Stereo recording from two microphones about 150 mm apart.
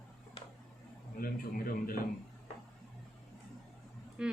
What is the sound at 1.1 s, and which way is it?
Speech, 70° left (ahead or behind).